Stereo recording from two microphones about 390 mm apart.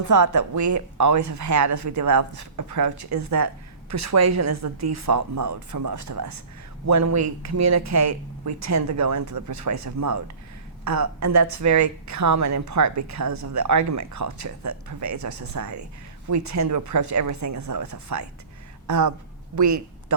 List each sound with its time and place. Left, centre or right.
0.0 s a woman's voice: right